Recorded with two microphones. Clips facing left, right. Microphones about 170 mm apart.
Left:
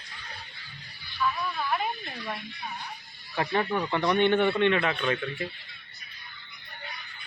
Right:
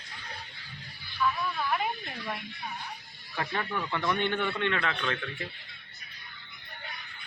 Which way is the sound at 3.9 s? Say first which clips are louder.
Left 7 dB; 20° left (ahead or behind).